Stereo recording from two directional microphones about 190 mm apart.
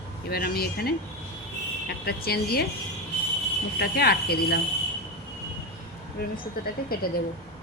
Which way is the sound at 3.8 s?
55° left (ahead or behind).